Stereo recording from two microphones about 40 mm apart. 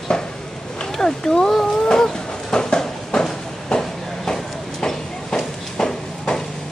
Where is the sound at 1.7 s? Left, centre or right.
Centre.